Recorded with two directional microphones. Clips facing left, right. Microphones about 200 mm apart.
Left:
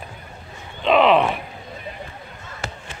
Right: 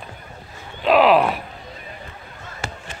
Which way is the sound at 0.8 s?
5° right (ahead or behind).